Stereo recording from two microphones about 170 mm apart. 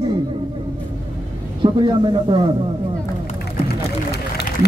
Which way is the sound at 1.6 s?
25° right (ahead or behind).